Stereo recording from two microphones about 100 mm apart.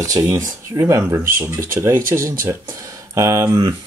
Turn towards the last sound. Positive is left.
turn(degrees=-30)  # may be behind; listen again after turning